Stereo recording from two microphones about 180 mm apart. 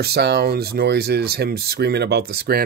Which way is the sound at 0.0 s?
65° right (ahead or behind).